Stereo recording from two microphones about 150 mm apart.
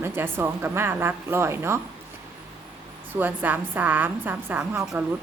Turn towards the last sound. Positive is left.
turn(degrees=-5)  # may be behind; listen again after turning